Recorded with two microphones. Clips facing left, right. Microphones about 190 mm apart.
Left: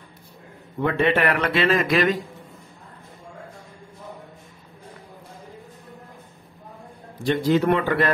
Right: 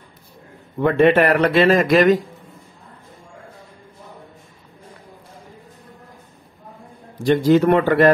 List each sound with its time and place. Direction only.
0.9 s speech: 45° right (ahead or behind)
7.2 s speech: 45° right (ahead or behind)